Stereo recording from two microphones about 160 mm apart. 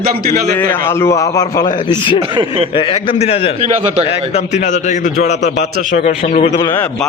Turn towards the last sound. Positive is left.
turn(degrees=50)  # may be behind; listen again after turning